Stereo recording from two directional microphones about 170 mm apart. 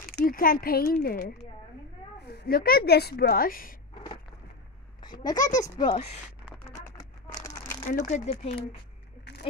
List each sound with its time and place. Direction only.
0.1 s a woman's voice: 55° left (ahead or behind)
3.9 s a sound: 30° left (ahead or behind)
5.0 s speech: 25° left (ahead or behind)
5.4 s speech: 45° left (ahead or behind)
5.8 s speech: 30° left (ahead or behind)
7.4 s crumpling: 20° left (ahead or behind)
7.8 s speech: 45° left (ahead or behind)